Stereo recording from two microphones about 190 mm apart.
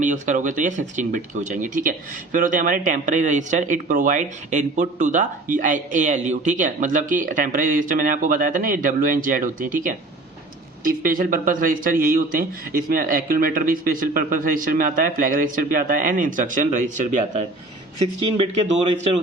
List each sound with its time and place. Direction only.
0.0 s a man's voice: 40° right (ahead or behind)